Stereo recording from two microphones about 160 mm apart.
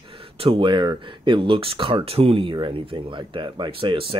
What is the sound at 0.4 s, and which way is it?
Speech, 35° right (ahead or behind).